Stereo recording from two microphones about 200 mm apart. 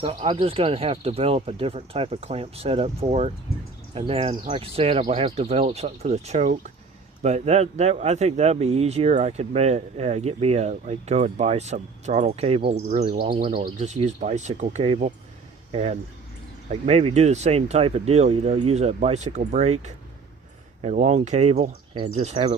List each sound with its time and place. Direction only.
0.0 s speech: 25° right (ahead or behind)
13.6 s speech: 35° right (ahead or behind)